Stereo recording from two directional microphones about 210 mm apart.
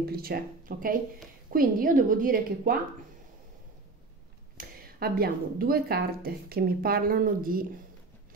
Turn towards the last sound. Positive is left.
turn(degrees=-40)  # may be behind; listen again after turning